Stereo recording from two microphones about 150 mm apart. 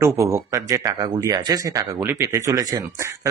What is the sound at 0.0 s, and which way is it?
A man's voice, 20° right (ahead or behind).